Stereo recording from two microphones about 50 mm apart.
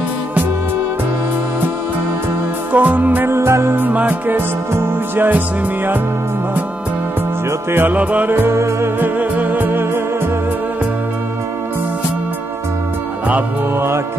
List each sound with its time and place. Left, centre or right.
2.7 s music: right
3.3 s music: right
3.7 s music: right
7.9 s music: right
8.3 s music: right
9.0 s music: right
13.7 s music: right